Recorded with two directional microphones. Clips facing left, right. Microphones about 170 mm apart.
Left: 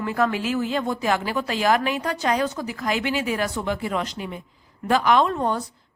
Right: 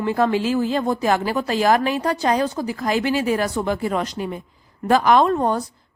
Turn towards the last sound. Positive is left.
turn(degrees=-40)  # may be behind; listen again after turning